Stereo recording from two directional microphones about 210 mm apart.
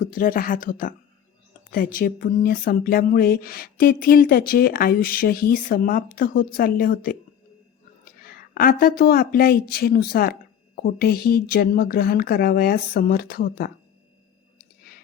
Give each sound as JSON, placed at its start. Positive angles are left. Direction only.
{"t": 0.0, "sound": "speech", "side_deg": 40}